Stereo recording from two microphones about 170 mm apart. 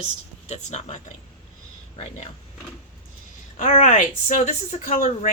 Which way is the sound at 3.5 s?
45° left (ahead or behind).